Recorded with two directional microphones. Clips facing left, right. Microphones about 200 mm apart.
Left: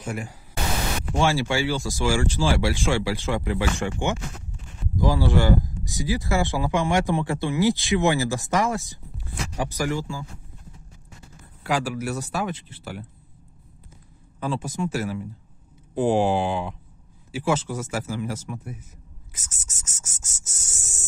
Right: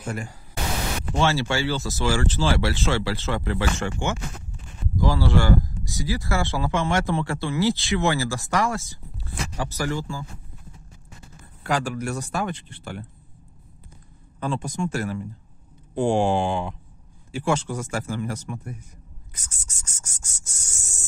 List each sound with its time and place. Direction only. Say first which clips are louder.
0.0 s speech: even; 10° left (ahead or behind)
11.6 s speech: even; 5° left (ahead or behind)
14.4 s speech: even; 5° left (ahead or behind)
19.3 s a sound: even; 5° left (ahead or behind)